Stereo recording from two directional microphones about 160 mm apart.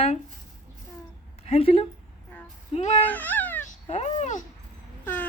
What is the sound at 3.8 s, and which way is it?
Speech, 45° left (ahead or behind).